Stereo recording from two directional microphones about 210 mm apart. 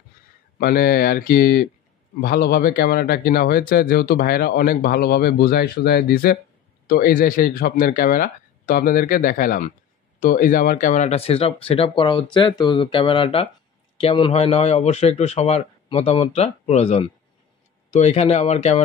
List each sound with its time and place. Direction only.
0.6 s a man's voice: 45° left (ahead or behind)